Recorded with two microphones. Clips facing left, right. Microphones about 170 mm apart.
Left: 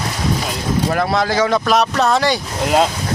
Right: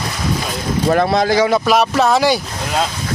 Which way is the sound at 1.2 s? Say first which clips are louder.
Right 2 dB; 15° right (ahead or behind).